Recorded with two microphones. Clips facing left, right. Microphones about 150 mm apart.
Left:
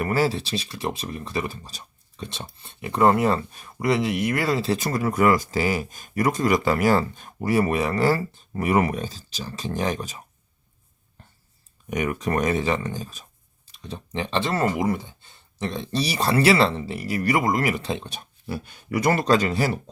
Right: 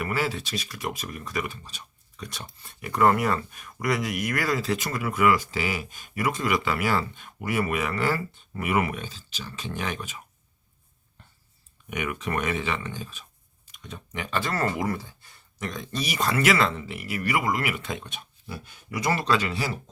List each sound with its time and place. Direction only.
0.0 s speech: 40° left (ahead or behind)
11.9 s speech: 40° left (ahead or behind)
18.4 s speech: 65° left (ahead or behind); by 19.7 s 45° left (ahead or behind)